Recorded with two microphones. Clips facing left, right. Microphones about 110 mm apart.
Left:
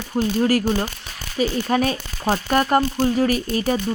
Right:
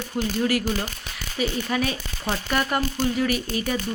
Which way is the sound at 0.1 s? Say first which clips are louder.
Left 5 dB; 40° left (ahead or behind).